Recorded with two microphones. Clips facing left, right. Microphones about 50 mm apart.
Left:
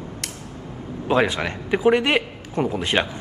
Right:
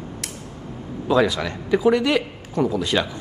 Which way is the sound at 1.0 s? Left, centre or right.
Left.